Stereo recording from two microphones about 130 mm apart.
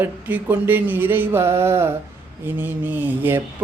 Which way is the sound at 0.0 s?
15° right (ahead or behind).